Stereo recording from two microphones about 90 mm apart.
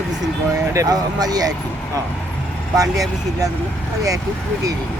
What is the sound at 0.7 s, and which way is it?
Speech, 40° right (ahead or behind).